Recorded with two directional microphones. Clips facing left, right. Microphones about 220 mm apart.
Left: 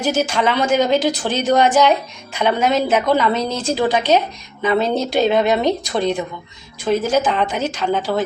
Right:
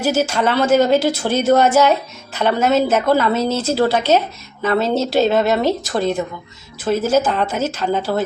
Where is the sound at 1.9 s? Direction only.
15° left (ahead or behind).